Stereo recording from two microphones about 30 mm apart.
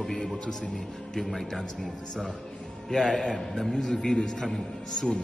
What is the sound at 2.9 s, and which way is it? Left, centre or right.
A man's voice, left.